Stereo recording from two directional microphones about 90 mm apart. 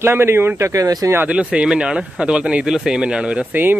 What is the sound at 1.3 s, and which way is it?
Speech, 10° right (ahead or behind).